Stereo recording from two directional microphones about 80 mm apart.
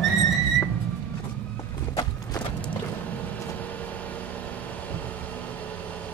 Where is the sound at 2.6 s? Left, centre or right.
Centre.